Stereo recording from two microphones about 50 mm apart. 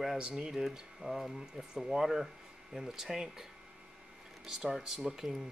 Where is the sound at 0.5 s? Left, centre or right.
Centre.